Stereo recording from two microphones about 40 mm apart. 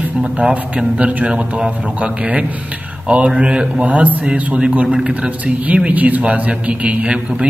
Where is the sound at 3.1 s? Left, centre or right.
Right.